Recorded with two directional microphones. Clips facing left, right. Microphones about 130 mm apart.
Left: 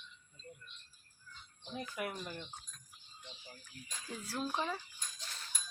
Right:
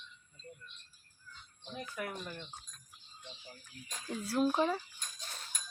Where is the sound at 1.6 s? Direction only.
10° left (ahead or behind).